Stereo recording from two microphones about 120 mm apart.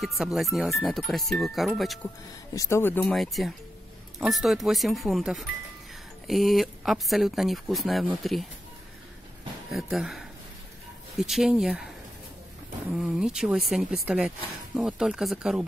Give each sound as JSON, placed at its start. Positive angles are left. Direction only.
{"t": 0.0, "sound": "speech", "side_deg": 0}
{"t": 2.5, "sound": "speech", "side_deg": 25}
{"t": 3.2, "sound": "speech", "side_deg": 0}
{"t": 9.7, "sound": "speech", "side_deg": 0}
{"t": 12.9, "sound": "speech", "side_deg": -5}